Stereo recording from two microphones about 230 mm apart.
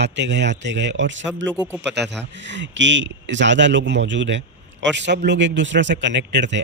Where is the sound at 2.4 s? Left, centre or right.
Right.